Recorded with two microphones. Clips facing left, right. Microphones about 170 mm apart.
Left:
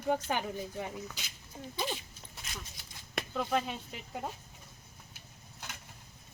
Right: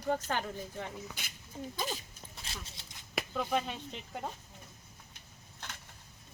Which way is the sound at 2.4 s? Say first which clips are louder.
Left 1 dB; 30° right (ahead or behind).